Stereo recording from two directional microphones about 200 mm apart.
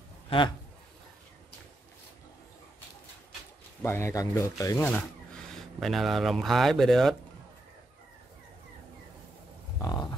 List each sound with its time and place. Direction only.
3.8 s speech: 15° left (ahead or behind)
9.8 s cattle: 20° left (ahead or behind)